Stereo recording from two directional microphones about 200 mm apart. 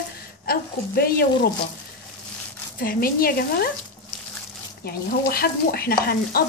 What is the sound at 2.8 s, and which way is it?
Speech, 50° left (ahead or behind).